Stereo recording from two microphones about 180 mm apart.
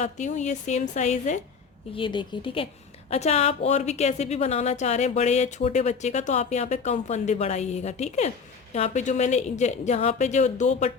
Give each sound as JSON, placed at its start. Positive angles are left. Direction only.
{"t": 0.0, "sound": "a woman's voice", "side_deg": 40}
{"t": 2.0, "sound": "a woman's voice", "side_deg": 25}